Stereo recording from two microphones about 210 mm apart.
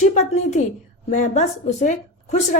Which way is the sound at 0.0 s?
35° left (ahead or behind).